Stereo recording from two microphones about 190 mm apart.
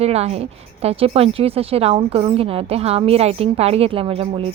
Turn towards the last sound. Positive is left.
turn(degrees=-30)  # may be behind; listen again after turning